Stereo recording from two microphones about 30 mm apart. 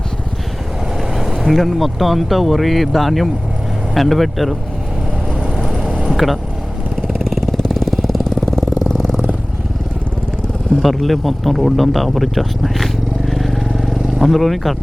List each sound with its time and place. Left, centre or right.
1.5 s speech: centre
5.6 s vehicle: centre
6.1 s speech: centre
7.1 s vehicle: centre
7.5 s engine: centre
8.9 s vehicle: centre
10.8 s speech: centre